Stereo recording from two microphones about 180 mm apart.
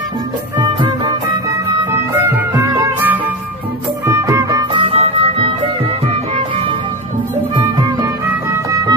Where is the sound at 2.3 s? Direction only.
15° right (ahead or behind).